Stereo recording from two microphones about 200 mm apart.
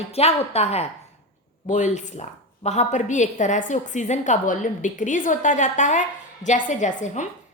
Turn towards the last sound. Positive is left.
turn(degrees=35)  # may be behind; listen again after turning